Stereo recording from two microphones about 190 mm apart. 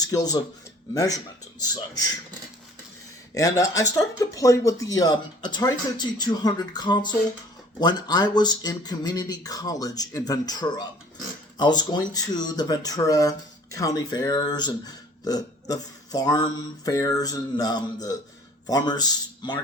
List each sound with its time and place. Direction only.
0.0 s speech: 20° left (ahead or behind)
3.3 s speech: 15° left (ahead or behind)